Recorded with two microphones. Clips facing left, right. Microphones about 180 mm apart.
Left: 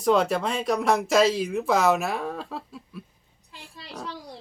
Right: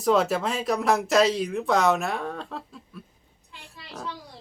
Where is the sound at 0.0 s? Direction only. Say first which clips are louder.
Even; centre (ahead or behind).